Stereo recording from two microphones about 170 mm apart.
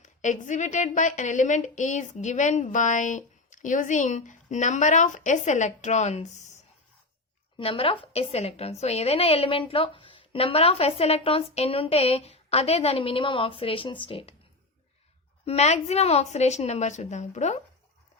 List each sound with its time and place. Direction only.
0.0 s a woman's voice: 45° left (ahead or behind)
7.6 s a woman's voice: 35° left (ahead or behind)
15.4 s a woman's voice: 40° left (ahead or behind)